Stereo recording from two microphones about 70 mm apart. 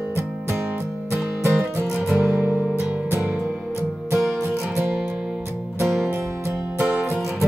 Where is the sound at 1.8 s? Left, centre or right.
Centre.